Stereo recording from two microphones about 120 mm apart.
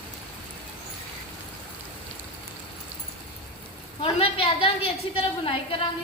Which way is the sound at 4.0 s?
50° left (ahead or behind).